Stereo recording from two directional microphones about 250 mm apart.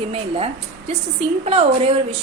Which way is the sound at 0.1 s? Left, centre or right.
Right.